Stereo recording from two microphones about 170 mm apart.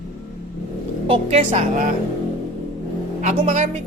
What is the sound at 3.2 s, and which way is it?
Speech, 45° right (ahead or behind).